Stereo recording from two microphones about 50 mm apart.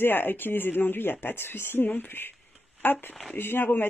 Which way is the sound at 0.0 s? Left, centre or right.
Left.